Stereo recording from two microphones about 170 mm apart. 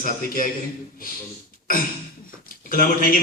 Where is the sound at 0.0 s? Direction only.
55° left (ahead or behind).